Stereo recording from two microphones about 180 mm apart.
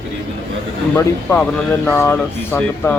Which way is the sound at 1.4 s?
5° left (ahead or behind).